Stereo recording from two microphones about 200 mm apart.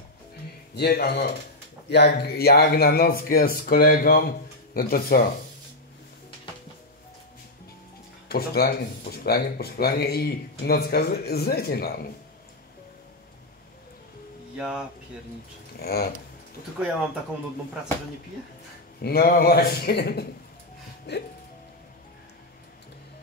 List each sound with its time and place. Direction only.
0.7 s speech: 55° left (ahead or behind)
8.3 s speech: 50° left (ahead or behind)
14.6 s speech: 5° right (ahead or behind)
15.8 s speech: 50° left (ahead or behind)
18.9 s speech: 50° left (ahead or behind)
21.1 s music: 60° left (ahead or behind)